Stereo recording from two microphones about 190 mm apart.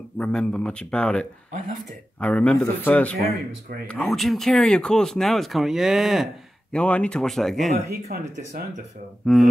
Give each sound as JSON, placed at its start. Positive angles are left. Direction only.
{"t": 0.2, "sound": "speech", "side_deg": 5}
{"t": 7.9, "sound": "speech", "side_deg": -55}
{"t": 9.2, "sound": "speech", "side_deg": 0}